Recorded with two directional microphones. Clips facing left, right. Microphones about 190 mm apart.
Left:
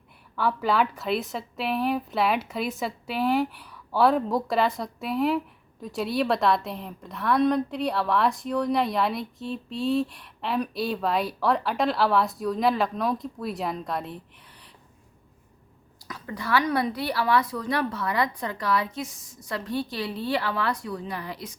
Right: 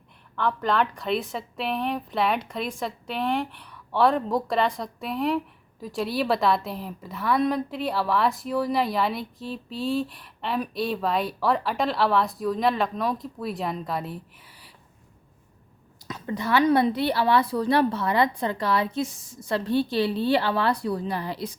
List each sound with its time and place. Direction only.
0.3 s a woman's voice: 5° left (ahead or behind)
16.0 s a woman's voice: 20° right (ahead or behind)